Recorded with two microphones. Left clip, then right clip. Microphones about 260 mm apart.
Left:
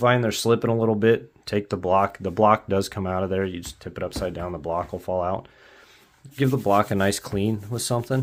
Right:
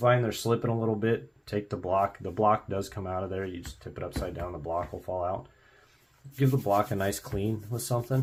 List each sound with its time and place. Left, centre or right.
0.0 s speech: left